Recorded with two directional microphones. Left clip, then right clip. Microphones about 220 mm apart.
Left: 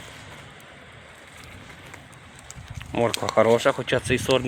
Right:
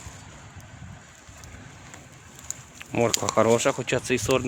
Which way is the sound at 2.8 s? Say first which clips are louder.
Left 1 dB; 15° right (ahead or behind).